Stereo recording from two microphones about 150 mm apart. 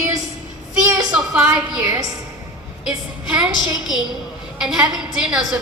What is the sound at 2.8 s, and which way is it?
A woman's voice, 5° right (ahead or behind).